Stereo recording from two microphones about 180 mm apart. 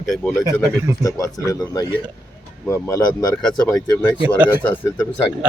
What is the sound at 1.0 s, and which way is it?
Speech, 20° left (ahead or behind).